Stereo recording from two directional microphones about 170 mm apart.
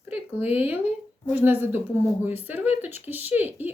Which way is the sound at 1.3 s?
10° right (ahead or behind).